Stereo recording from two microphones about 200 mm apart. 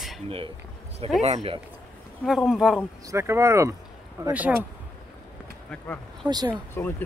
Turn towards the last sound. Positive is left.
turn(degrees=10)  # may be behind; listen again after turning